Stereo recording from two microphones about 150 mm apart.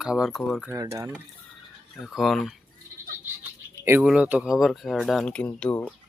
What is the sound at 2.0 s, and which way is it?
Speech, centre (ahead or behind).